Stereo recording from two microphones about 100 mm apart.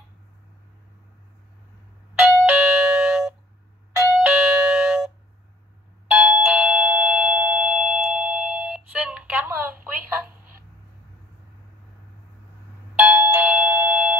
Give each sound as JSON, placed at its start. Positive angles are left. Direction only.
{"t": 2.1, "sound": "doorbell", "side_deg": -15}
{"t": 6.1, "sound": "doorbell", "side_deg": -15}
{"t": 13.1, "sound": "doorbell", "side_deg": -25}